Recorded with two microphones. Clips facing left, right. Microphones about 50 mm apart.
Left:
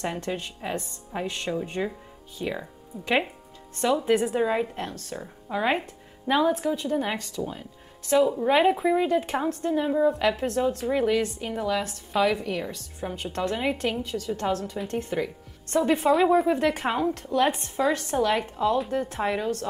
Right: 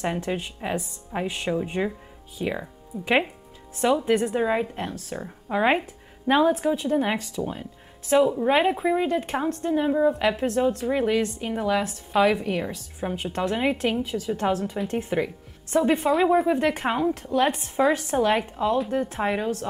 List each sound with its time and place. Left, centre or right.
0.0 s a woman's voice: centre
4.0 s a woman's voice: centre
5.1 s a woman's voice: right
8.4 s a woman's voice: centre
15.7 s a woman's voice: centre
17.7 s a woman's voice: centre
18.4 s a woman's voice: centre